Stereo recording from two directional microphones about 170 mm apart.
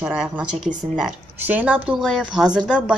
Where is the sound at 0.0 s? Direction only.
5° right (ahead or behind).